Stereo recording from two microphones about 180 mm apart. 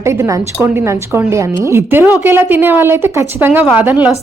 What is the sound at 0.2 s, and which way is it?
A woman's voice, 15° right (ahead or behind).